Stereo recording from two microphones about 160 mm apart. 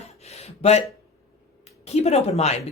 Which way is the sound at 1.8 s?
40° left (ahead or behind).